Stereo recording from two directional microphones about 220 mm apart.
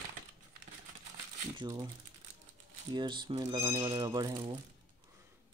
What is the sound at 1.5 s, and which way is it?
Speech, 15° right (ahead or behind).